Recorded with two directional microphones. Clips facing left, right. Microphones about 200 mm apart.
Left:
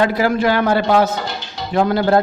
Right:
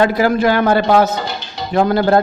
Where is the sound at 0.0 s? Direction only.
45° right (ahead or behind).